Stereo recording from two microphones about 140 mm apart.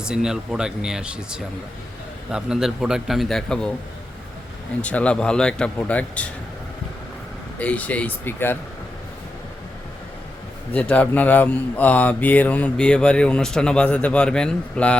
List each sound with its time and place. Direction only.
0.0 s a man's voice: 5° right (ahead or behind)
4.8 s speech: 10° left (ahead or behind)
7.6 s speech: 10° left (ahead or behind)
10.7 s speech: 10° left (ahead or behind)